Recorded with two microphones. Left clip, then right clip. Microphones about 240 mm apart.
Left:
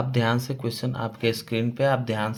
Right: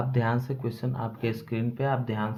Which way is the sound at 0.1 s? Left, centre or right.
Left.